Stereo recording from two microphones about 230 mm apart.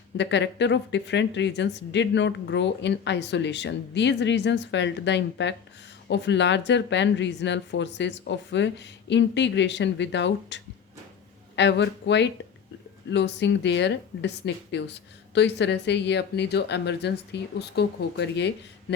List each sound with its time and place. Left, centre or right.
0.2 s a woman's voice: left